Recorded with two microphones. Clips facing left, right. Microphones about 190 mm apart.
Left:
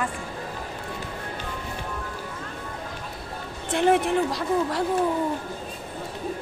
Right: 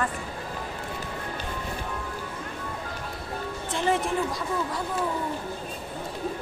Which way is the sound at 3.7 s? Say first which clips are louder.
Left 5 dB; 60° left (ahead or behind).